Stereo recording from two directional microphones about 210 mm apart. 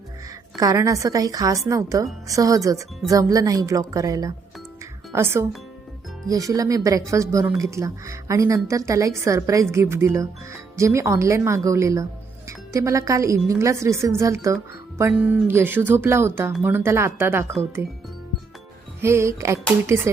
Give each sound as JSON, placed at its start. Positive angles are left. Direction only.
{"t": 0.5, "sound": "speech", "side_deg": -15}
{"t": 19.0, "sound": "speech", "side_deg": -15}